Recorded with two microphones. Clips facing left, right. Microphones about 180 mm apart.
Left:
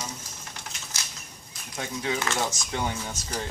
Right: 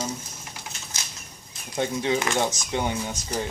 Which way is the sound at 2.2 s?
15° right (ahead or behind).